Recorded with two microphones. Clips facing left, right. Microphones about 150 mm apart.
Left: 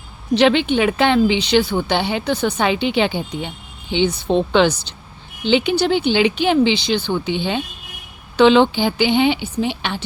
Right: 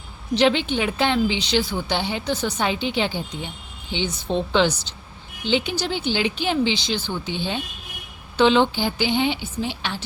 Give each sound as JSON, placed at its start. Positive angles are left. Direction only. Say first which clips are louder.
{"t": 0.3, "sound": "a woman's voice", "louder": "left 5 dB", "side_deg": 65}